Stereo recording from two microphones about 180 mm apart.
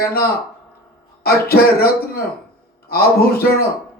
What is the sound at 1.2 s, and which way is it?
A man's voice, 60° left (ahead or behind).